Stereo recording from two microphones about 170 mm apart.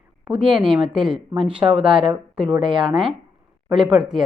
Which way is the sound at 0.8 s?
5° right (ahead or behind).